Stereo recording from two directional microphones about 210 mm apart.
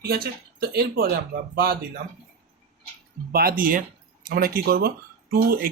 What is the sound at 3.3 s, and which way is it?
Speech, 45° right (ahead or behind).